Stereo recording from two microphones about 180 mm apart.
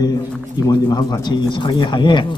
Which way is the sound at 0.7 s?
20° left (ahead or behind).